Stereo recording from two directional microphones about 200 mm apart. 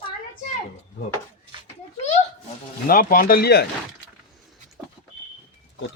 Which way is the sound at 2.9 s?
45° left (ahead or behind).